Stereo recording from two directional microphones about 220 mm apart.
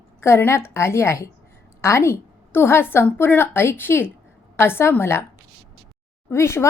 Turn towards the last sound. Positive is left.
turn(degrees=10)  # may be behind; listen again after turning